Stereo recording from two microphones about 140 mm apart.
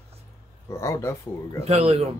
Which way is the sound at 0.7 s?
20° left (ahead or behind).